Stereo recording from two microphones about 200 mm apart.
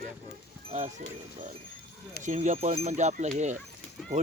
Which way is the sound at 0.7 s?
30° right (ahead or behind).